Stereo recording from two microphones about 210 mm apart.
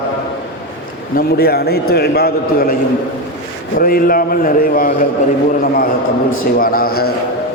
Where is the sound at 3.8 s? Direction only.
45° left (ahead or behind).